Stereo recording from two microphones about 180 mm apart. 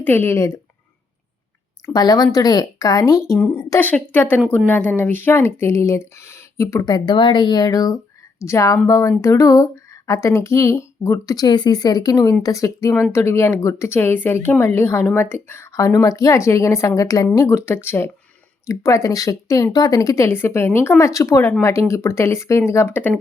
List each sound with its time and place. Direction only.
0.0 s speech: 10° left (ahead or behind)
1.9 s speech: 20° left (ahead or behind)